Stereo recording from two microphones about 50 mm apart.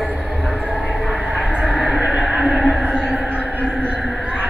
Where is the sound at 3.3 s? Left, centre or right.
Right.